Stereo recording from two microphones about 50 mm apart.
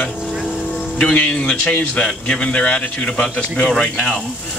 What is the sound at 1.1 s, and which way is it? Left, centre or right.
Speech, left.